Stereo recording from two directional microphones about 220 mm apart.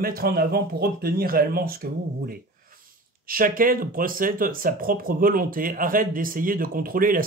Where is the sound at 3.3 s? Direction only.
40° right (ahead or behind).